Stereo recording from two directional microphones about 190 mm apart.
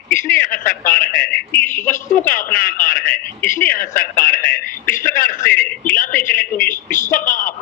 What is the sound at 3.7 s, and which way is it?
Speech, 45° left (ahead or behind).